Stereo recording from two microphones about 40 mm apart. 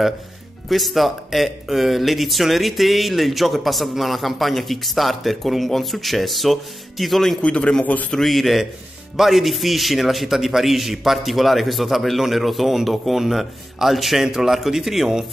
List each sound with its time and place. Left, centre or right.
0.7 s a man's voice: centre
7.4 s a man's voice: left
7.8 s a man's voice: left
8.1 s a man's voice: centre